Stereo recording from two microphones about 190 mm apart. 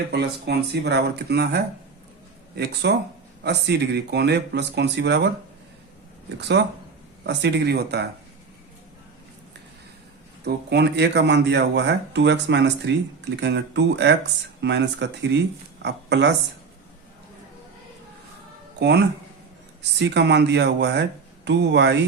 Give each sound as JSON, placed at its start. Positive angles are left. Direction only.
{"t": 0.1, "sound": "speech", "side_deg": -60}
{"t": 6.4, "sound": "speech", "side_deg": -65}
{"t": 10.4, "sound": "speech", "side_deg": -65}
{"t": 18.8, "sound": "speech", "side_deg": -65}